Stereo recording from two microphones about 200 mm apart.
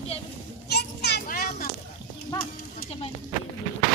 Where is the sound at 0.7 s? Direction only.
55° left (ahead or behind).